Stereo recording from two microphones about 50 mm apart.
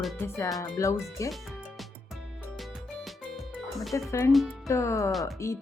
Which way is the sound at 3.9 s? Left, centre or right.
Left.